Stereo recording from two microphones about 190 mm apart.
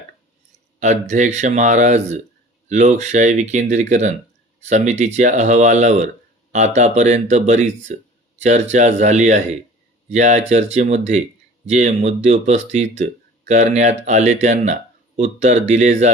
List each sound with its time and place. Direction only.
0.8 s speech: 40° right (ahead or behind)